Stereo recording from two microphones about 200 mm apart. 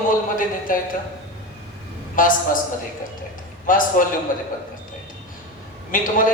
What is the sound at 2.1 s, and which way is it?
Speech, 40° left (ahead or behind).